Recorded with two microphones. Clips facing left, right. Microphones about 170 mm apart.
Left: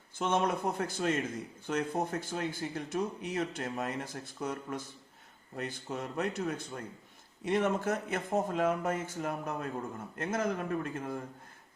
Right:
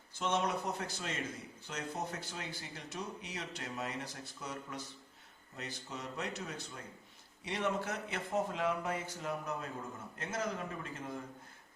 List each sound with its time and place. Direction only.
0.2 s speech: 50° left (ahead or behind)